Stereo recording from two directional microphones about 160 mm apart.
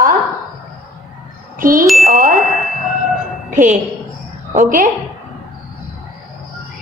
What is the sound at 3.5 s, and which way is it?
A woman's voice, 55° right (ahead or behind).